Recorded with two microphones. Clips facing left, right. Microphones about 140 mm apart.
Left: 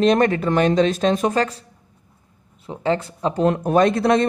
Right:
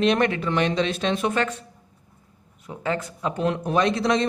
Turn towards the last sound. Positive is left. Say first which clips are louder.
# left 5 dB
turn(degrees=55)  # may be behind; listen again after turning